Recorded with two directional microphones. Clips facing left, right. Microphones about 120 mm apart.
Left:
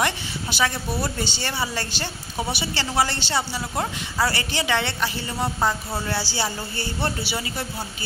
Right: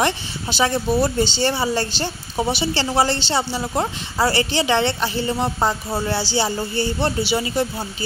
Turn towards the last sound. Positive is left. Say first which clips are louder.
# right 8 dB
turn(degrees=-20)  # may be behind; listen again after turning